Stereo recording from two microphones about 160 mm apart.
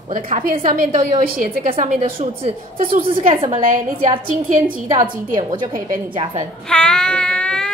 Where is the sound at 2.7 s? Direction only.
60° right (ahead or behind).